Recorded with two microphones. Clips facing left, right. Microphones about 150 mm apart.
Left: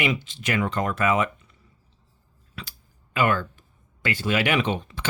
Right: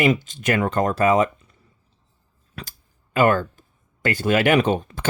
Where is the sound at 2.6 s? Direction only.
45° right (ahead or behind).